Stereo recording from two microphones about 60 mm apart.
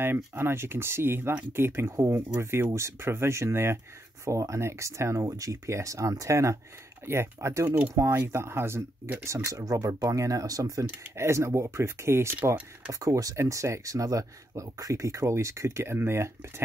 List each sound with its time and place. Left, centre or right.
0.0 s speech: right
7.1 s speech: right
8.3 s speech: right
9.7 s speech: right
11.1 s speech: right
13.0 s speech: right